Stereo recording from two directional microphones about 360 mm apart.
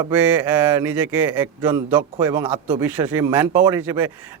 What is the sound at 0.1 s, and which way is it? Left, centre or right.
Speech, centre.